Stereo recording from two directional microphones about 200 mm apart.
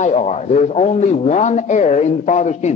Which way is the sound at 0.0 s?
35° left (ahead or behind).